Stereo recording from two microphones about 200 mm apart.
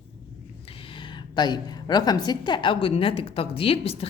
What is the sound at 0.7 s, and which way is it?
A woman's voice, 25° left (ahead or behind).